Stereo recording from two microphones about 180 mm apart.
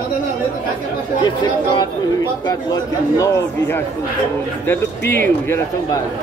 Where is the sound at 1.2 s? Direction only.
25° left (ahead or behind).